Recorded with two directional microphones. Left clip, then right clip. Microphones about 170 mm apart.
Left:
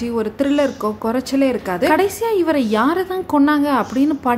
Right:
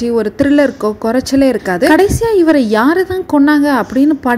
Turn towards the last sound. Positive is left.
turn(degrees=-25)  # may be behind; listen again after turning